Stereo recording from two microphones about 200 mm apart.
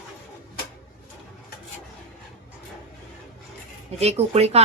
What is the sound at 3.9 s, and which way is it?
Speech, 30° right (ahead or behind).